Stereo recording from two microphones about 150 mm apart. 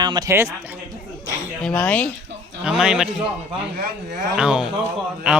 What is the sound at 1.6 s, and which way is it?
Speech, 5° left (ahead or behind).